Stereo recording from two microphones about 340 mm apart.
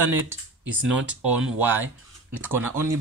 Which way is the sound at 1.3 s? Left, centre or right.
Centre.